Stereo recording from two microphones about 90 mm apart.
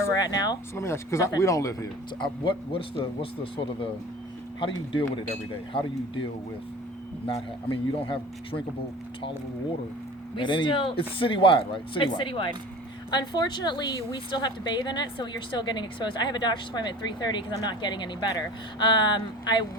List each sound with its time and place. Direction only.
0.2 s speech: 45° left (ahead or behind)
0.8 s speech: 35° left (ahead or behind)
2.4 s a man's voice: 75° left (ahead or behind)
4.9 s a man's voice: 65° left (ahead or behind)
7.3 s a man's voice: 70° left (ahead or behind)
10.3 s a woman's voice: 60° left (ahead or behind)
13.1 s a woman's voice: 55° left (ahead or behind)